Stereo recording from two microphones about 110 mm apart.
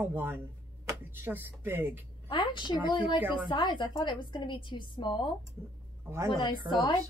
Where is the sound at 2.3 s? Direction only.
50° left (ahead or behind).